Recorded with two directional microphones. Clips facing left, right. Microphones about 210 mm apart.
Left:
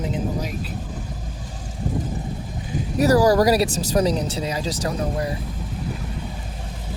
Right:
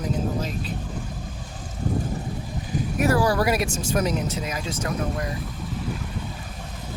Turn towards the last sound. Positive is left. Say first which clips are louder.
# left 3 dB
turn(degrees=30)  # may be behind; listen again after turning